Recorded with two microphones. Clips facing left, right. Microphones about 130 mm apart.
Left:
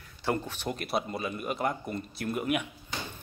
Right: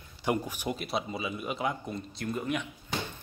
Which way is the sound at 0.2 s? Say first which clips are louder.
Right 1 dB; 15° right (ahead or behind).